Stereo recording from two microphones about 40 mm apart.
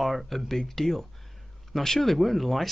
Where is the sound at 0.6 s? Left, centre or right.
Centre.